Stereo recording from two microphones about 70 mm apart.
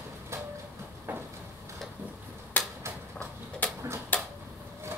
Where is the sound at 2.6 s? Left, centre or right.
Left.